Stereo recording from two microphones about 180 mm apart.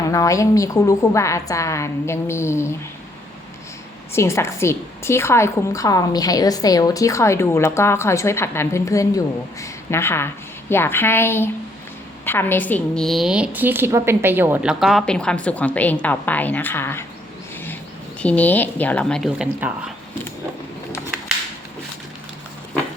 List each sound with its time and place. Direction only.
0.1 s a woman's voice: 20° left (ahead or behind)
4.1 s a woman's voice: 15° left (ahead or behind)
18.2 s a woman's voice: 5° left (ahead or behind)
19.5 s speech: 10° right (ahead or behind)